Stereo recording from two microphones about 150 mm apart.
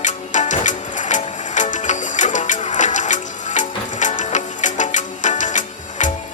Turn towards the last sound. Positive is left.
turn(degrees=55)  # may be behind; listen again after turning